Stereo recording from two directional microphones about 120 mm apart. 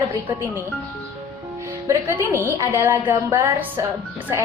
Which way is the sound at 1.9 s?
20° right (ahead or behind).